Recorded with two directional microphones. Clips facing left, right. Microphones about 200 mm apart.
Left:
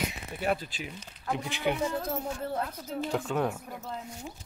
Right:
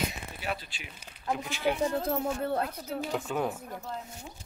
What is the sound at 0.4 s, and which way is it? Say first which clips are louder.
Speech: left 7 dB; 50° left (ahead or behind).